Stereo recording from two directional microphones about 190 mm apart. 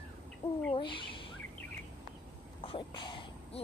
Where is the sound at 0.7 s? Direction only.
25° left (ahead or behind).